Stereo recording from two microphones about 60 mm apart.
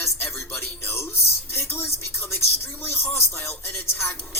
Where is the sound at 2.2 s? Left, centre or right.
Left.